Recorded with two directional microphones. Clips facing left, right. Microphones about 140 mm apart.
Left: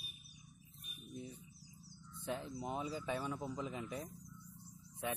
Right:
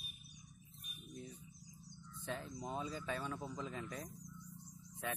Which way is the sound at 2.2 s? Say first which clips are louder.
Left 3 dB; 25° left (ahead or behind).